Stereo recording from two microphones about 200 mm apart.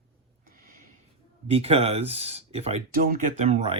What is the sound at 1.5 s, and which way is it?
Speech, 30° right (ahead or behind).